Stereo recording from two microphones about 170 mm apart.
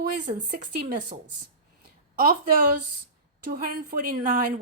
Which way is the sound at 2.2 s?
60° right (ahead or behind).